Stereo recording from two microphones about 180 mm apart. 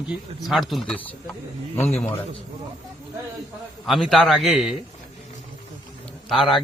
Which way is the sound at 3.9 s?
Centre (ahead or behind).